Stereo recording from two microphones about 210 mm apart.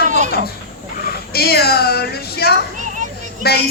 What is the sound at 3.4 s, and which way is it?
Speech, 50° left (ahead or behind).